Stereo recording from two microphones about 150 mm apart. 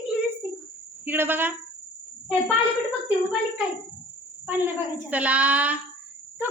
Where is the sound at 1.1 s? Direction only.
15° right (ahead or behind).